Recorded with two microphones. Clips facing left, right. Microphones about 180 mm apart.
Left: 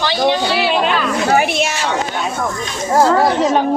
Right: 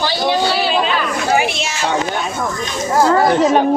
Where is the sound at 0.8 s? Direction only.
55° left (ahead or behind).